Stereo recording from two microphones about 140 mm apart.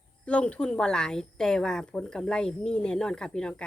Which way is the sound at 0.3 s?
10° left (ahead or behind).